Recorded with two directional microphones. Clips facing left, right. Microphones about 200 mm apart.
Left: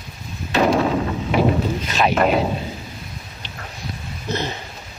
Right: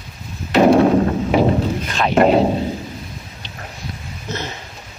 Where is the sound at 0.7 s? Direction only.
50° right (ahead or behind).